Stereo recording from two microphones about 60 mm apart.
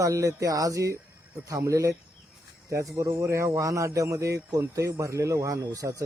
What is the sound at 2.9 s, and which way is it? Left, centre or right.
Speech, right.